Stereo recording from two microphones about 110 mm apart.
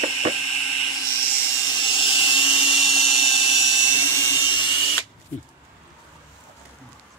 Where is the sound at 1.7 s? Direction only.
50° left (ahead or behind).